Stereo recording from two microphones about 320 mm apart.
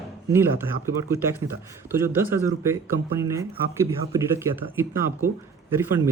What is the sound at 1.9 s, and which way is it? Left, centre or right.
A man's voice, centre.